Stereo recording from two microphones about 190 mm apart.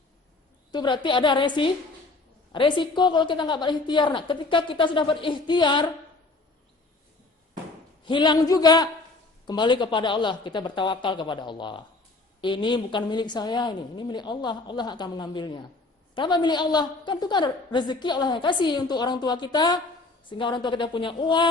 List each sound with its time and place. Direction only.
0.7 s a woman's voice: 25° left (ahead or behind)
8.0 s a woman's voice: 25° left (ahead or behind)